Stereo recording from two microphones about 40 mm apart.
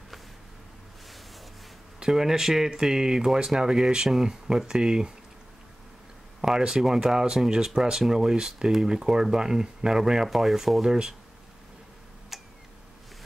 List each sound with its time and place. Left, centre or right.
2.0 s speech: centre
6.4 s speech: centre
12.3 s tick-tock: centre